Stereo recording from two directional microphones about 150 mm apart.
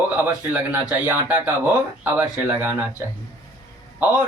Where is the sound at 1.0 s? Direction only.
10° right (ahead or behind).